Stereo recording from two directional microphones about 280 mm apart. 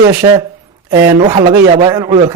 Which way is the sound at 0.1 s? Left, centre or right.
Centre.